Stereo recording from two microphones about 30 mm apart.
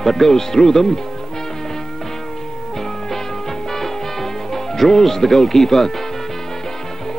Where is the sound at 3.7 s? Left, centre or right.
Centre.